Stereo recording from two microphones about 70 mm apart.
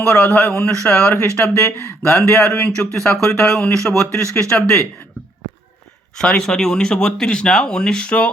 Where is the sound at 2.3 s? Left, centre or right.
Centre.